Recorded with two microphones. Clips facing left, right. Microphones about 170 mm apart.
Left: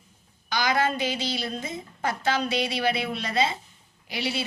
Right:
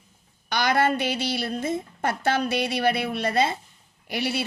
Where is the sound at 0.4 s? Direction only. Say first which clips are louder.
Right 3 dB; 55° right (ahead or behind).